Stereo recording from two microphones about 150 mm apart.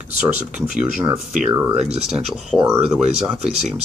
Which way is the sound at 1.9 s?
5° right (ahead or behind).